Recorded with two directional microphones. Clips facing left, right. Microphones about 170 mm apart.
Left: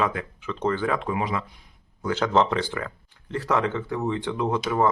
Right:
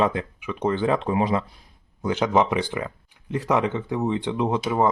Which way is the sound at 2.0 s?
15° right (ahead or behind).